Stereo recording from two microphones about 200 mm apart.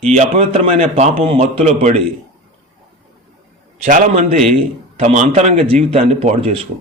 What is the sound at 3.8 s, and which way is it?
A man's voice, 35° right (ahead or behind).